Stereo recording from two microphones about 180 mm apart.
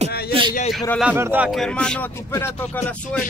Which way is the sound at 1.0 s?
10° right (ahead or behind).